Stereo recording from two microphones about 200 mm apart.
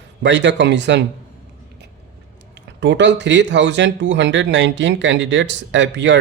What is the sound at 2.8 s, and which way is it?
Speech, 60° right (ahead or behind).